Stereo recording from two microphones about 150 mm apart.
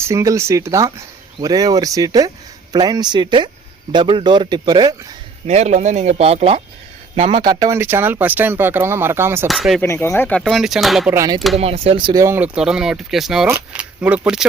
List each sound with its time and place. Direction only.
0.0 s speech: 20° right (ahead or behind)
5.5 s speech: 50° right (ahead or behind)
7.4 s speech: 25° right (ahead or behind)
9.5 s speech: centre (ahead or behind)
9.8 s speech: 20° left (ahead or behind)
10.4 s speech: centre (ahead or behind)
11.1 s speech: 20° right (ahead or behind)
11.3 s speech: centre (ahead or behind)
11.6 s speech: 40° right (ahead or behind)
12.1 s speech: 15° right (ahead or behind)